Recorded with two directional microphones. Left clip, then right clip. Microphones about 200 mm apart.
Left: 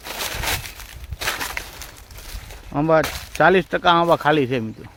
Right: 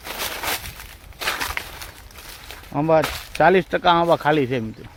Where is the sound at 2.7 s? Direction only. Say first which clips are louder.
Even; 15° left (ahead or behind).